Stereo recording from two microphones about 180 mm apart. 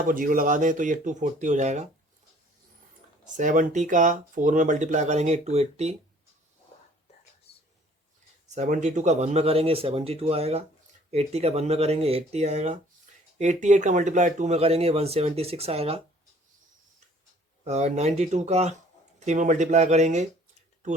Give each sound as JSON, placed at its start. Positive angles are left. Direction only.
{"t": 0.1, "sound": "speech", "side_deg": -50}
{"t": 3.3, "sound": "speech", "side_deg": -45}
{"t": 8.4, "sound": "speech", "side_deg": -40}
{"t": 13.1, "sound": "a sound", "side_deg": -40}
{"t": 13.4, "sound": "speech", "side_deg": -40}
{"t": 17.6, "sound": "speech", "side_deg": -35}